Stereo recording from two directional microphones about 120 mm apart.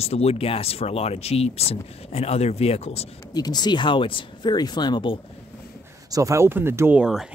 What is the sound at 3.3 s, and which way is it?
Speech, 35° left (ahead or behind).